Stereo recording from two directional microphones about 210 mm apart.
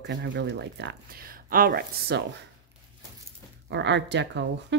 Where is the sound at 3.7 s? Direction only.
60° right (ahead or behind).